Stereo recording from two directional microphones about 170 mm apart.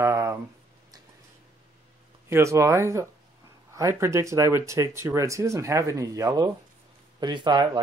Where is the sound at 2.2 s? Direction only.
15° right (ahead or behind).